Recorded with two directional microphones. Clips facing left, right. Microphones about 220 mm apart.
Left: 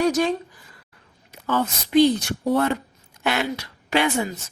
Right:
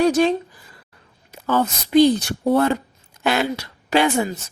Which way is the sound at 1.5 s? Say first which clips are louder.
Right 3 dB; 40° right (ahead or behind).